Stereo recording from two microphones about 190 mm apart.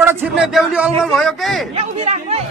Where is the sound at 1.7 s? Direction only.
35° right (ahead or behind).